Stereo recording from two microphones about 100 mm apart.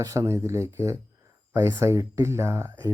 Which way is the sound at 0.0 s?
35° right (ahead or behind).